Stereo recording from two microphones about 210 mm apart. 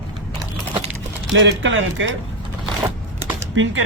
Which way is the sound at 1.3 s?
60° right (ahead or behind).